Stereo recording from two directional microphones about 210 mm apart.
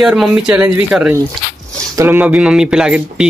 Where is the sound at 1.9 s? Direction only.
10° right (ahead or behind).